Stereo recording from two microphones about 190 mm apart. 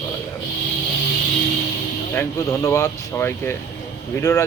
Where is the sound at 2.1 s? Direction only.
15° left (ahead or behind).